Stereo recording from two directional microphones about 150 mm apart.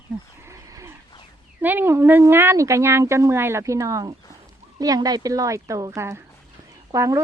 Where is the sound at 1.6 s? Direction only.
15° right (ahead or behind).